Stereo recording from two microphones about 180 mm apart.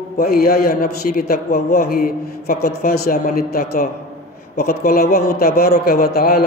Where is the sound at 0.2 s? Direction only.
60° left (ahead or behind).